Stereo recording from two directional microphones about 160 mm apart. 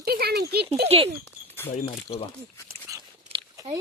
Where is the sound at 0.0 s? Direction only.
75° right (ahead or behind).